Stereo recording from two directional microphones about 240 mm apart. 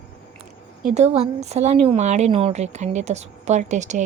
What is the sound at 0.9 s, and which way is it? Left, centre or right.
A woman's voice, right.